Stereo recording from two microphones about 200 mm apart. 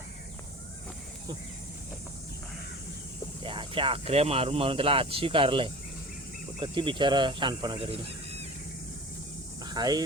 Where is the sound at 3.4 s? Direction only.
25° right (ahead or behind).